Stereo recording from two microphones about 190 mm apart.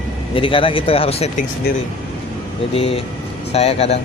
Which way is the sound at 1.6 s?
55° left (ahead or behind).